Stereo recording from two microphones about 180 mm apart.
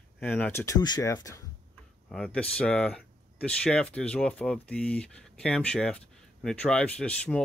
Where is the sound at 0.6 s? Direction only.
20° left (ahead or behind).